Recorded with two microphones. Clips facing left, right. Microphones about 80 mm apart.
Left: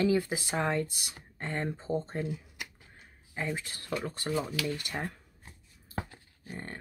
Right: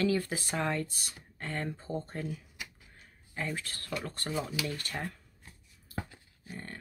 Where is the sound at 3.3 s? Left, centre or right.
Centre.